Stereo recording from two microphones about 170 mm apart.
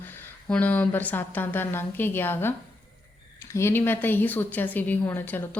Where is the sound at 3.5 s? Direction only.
15° left (ahead or behind).